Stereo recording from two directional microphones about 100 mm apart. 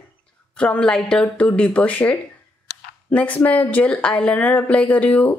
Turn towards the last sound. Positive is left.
turn(degrees=15)  # may be behind; listen again after turning